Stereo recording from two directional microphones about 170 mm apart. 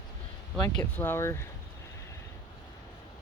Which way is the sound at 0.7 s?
10° left (ahead or behind).